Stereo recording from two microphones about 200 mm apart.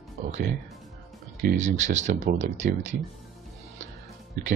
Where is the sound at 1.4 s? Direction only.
35° right (ahead or behind).